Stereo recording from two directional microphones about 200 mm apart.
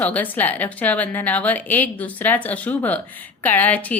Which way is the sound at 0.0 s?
10° left (ahead or behind).